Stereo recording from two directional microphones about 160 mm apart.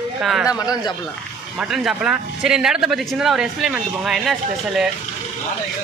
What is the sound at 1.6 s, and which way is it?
Speech, centre (ahead or behind).